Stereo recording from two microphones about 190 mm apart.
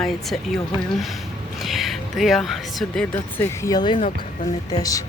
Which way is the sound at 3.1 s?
15° left (ahead or behind).